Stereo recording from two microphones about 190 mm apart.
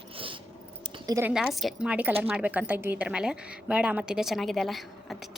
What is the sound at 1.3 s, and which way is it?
A woman's voice, centre (ahead or behind).